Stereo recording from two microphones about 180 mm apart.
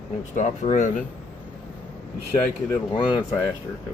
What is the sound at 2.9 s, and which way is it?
Speech, 25° left (ahead or behind).